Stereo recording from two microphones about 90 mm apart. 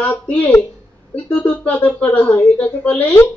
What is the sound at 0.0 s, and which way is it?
Speech, 15° left (ahead or behind).